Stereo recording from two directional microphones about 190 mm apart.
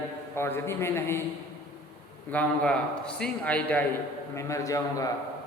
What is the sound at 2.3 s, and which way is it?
A man's voice, 5° left (ahead or behind).